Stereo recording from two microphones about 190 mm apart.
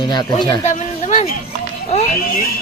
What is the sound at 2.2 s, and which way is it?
Speech, 50° left (ahead or behind).